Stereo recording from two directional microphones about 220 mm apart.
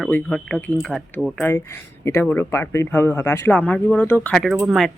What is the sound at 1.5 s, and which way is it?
Speech, 10° left (ahead or behind).